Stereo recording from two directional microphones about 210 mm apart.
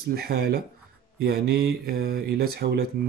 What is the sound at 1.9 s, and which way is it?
Speech, 45° right (ahead or behind).